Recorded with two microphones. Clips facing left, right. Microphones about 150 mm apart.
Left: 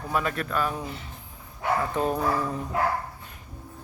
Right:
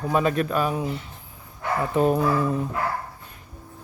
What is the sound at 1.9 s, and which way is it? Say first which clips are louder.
Speech: right 6 dB; 10° right (ahead or behind).